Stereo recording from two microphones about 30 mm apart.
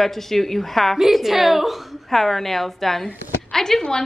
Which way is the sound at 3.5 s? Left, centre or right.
Centre.